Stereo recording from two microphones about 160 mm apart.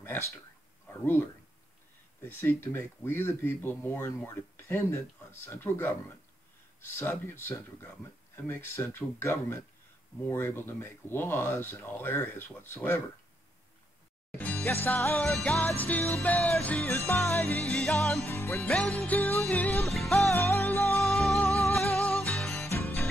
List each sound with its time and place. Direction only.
0.0 s speech: 15° left (ahead or behind)
14.4 s music: 10° left (ahead or behind)
14.9 s speech: 15° left (ahead or behind)
15.1 s music: 5° left (ahead or behind)
16.8 s speech: 15° left (ahead or behind)
18.2 s speech: 15° left (ahead or behind)
18.6 s music: centre (ahead or behind)
20.3 s music: 15° left (ahead or behind)
21.0 s music: centre (ahead or behind)
22.7 s music: 15° left (ahead or behind)